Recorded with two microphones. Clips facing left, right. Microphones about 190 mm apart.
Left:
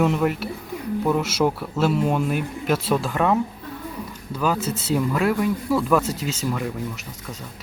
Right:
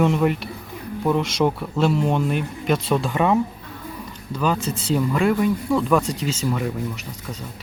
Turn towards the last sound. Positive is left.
turn(degrees=0)  # may be behind; listen again after turning